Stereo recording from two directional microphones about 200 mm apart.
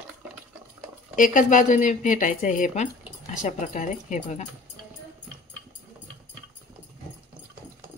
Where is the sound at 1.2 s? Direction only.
40° left (ahead or behind).